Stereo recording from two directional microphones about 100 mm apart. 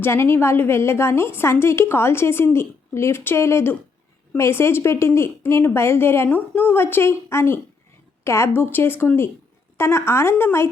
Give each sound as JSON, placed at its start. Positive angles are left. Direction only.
{"t": 0.0, "sound": "a woman's voice", "side_deg": 25}